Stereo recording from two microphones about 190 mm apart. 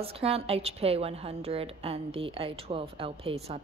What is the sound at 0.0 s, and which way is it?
A woman's voice, 30° right (ahead or behind).